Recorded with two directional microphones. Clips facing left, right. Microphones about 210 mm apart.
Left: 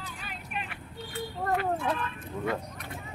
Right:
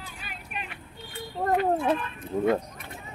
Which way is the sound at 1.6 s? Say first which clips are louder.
Right 5 dB; 25° right (ahead or behind).